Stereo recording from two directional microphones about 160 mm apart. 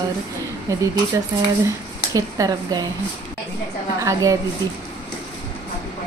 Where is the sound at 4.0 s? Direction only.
20° right (ahead or behind).